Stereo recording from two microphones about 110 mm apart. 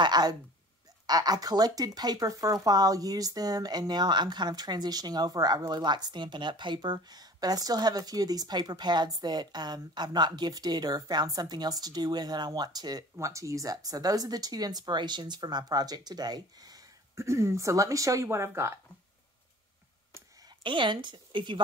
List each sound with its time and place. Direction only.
0.0 s speech: 40° right (ahead or behind)
20.4 s a woman's voice: 45° right (ahead or behind)